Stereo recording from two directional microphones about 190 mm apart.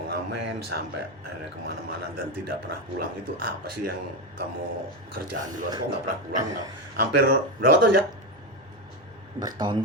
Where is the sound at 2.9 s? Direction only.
50° right (ahead or behind).